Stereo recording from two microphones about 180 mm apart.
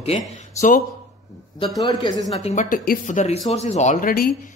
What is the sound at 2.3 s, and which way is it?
A man's voice, 40° left (ahead or behind).